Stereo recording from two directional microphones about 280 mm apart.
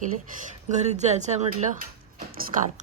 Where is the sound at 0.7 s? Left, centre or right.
Right.